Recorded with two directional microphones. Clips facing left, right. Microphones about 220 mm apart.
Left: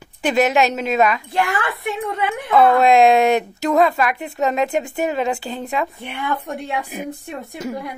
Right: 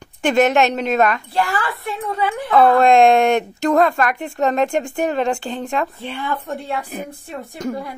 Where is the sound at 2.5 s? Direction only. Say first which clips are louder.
Right 1 dB; centre (ahead or behind).